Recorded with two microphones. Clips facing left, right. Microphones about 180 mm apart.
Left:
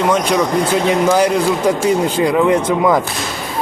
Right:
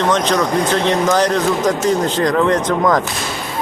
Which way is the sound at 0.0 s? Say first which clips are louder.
Left 1 dB; 10° left (ahead or behind).